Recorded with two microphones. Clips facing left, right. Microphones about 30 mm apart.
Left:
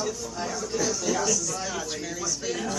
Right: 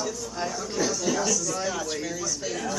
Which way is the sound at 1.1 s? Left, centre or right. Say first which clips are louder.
Right 1 dB; centre.